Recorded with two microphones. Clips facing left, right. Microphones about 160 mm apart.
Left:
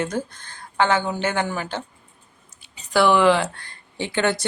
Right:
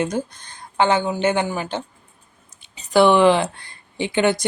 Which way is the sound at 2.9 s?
20° right (ahead or behind).